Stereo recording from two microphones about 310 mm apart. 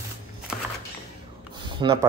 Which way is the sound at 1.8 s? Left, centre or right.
Centre.